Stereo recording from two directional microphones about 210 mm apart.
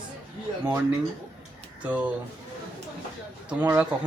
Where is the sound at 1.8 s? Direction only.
5° right (ahead or behind).